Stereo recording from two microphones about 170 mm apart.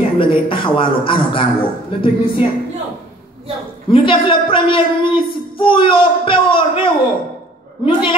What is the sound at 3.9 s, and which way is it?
A woman's voice, 30° left (ahead or behind).